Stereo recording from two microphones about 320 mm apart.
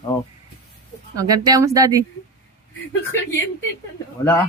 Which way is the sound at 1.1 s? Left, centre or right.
Centre.